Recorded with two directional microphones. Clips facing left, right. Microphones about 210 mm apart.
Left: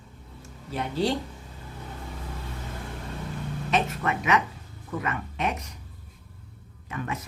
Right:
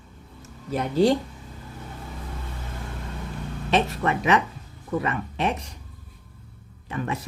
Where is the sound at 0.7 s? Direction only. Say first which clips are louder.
Right 6 dB; 40° right (ahead or behind).